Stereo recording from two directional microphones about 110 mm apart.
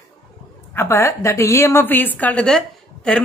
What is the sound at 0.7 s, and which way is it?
A woman's voice, 25° left (ahead or behind).